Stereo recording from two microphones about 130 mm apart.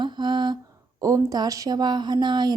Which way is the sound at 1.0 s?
25° right (ahead or behind).